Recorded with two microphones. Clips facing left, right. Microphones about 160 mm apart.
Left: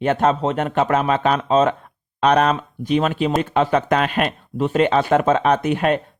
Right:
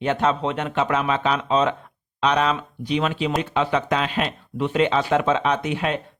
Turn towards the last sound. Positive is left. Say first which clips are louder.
# left 5 dB
turn(degrees=50)  # may be behind; listen again after turning